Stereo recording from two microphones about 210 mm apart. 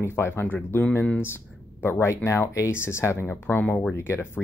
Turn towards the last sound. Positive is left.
turn(degrees=10)  # may be behind; listen again after turning